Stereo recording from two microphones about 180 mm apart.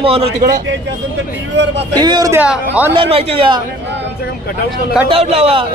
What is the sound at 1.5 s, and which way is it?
Speech, 80° right.